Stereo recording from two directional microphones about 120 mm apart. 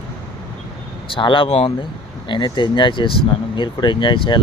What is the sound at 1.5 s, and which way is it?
Speech, 55° left (ahead or behind).